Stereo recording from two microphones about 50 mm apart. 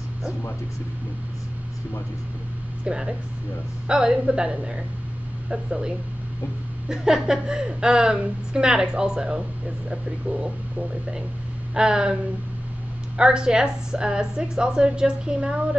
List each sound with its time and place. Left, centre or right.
2.8 s a woman's voice: centre
11.7 s a woman's voice: centre
13.2 s a woman's voice: centre